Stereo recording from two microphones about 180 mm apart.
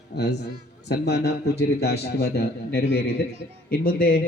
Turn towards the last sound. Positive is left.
turn(degrees=55)  # may be behind; listen again after turning